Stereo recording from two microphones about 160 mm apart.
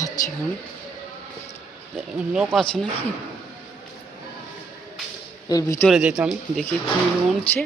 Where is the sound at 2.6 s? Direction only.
5° left (ahead or behind).